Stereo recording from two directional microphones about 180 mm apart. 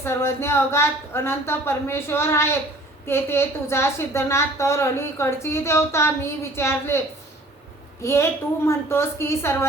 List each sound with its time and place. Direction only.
0.0 s a woman's voice: 15° left (ahead or behind)
8.0 s a woman's voice: 15° left (ahead or behind)